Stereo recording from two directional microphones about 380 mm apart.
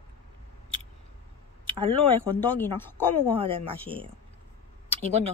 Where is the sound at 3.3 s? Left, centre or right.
Centre.